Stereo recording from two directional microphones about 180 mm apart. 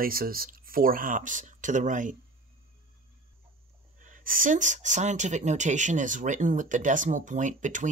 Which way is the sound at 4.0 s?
45° right (ahead or behind).